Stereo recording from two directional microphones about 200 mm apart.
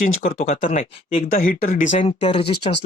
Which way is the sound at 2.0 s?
30° left (ahead or behind).